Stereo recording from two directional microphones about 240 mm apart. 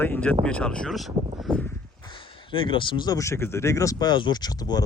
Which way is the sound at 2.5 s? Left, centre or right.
Left.